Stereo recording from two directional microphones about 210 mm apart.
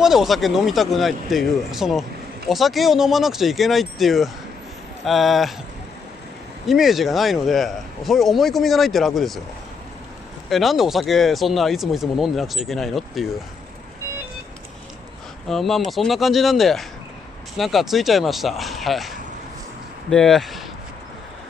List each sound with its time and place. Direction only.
0.0 s speech: centre (ahead or behind)
6.7 s speech: centre (ahead or behind)
10.5 s speech: centre (ahead or behind)
15.4 s speech: centre (ahead or behind)